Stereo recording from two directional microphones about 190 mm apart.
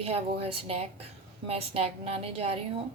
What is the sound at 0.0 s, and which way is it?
A woman's voice, 30° right (ahead or behind).